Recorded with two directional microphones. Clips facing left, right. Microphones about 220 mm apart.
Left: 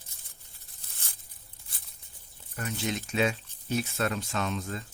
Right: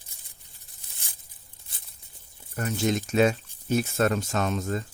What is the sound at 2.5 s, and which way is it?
Speech, 45° right (ahead or behind).